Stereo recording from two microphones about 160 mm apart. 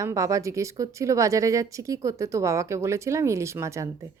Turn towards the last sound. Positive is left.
turn(degrees=-20)  # may be behind; listen again after turning